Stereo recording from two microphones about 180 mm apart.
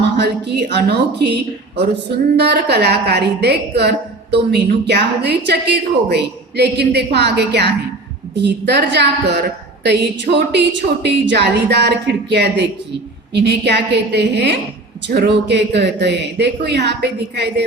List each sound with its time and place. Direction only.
0.0 s a woman's voice: 70° right (ahead or behind)